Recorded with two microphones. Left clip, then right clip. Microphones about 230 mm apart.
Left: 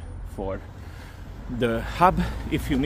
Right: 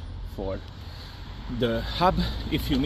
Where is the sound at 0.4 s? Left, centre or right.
Centre.